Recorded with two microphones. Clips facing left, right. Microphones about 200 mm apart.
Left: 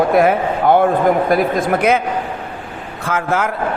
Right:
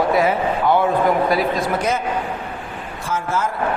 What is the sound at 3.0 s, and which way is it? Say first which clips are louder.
Speech: left 4 dB; 65° left (ahead or behind).